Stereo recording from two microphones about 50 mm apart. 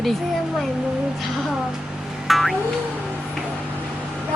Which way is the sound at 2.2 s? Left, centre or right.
Centre.